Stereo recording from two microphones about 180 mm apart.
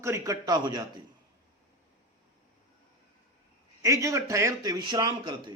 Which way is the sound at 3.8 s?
15° right (ahead or behind).